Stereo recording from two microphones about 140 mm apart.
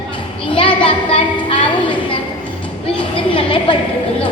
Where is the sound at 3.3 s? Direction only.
40° left (ahead or behind).